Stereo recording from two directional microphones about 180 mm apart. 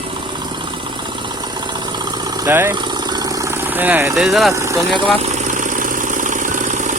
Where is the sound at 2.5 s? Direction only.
15° right (ahead or behind).